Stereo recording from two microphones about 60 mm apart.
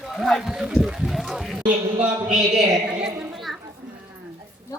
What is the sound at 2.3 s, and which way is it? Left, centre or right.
Speech, centre.